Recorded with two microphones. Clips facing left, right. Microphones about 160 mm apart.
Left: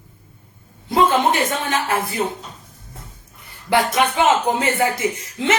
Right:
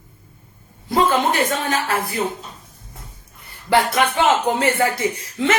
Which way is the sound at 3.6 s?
15° left (ahead or behind).